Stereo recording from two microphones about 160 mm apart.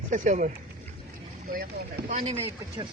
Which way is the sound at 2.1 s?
40° right (ahead or behind).